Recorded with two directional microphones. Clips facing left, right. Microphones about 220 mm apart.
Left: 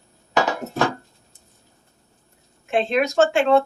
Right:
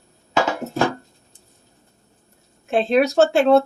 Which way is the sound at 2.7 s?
35° right (ahead or behind).